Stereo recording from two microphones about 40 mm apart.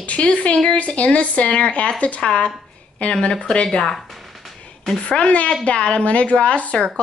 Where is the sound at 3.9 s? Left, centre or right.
Centre.